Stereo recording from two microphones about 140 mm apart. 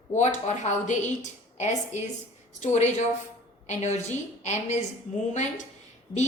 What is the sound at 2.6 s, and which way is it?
A woman's voice, 55° left (ahead or behind).